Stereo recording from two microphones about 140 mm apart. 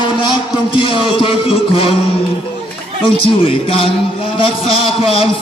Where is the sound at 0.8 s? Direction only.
40° left (ahead or behind).